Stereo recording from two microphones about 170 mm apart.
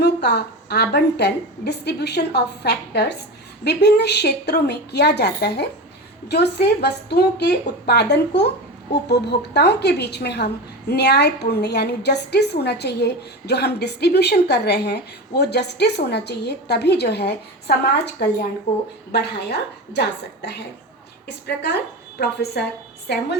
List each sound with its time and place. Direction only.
0.0 s a woman's voice: 80° left